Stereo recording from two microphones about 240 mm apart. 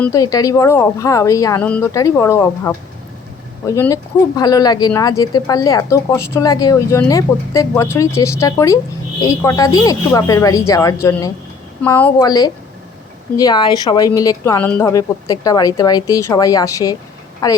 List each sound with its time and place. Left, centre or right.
0.0 s speech: centre